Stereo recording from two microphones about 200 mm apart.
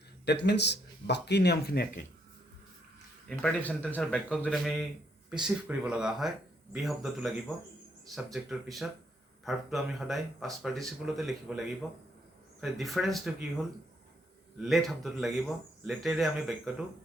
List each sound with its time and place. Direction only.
0.3 s speech: 60° left (ahead or behind)
3.2 s speech: 5° left (ahead or behind)
14.6 s speech: centre (ahead or behind)